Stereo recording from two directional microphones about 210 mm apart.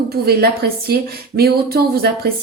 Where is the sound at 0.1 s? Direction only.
50° right (ahead or behind).